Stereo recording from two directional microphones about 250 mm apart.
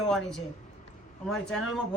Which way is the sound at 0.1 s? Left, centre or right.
Centre.